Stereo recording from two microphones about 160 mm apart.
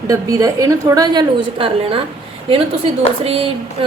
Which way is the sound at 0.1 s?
20° right (ahead or behind).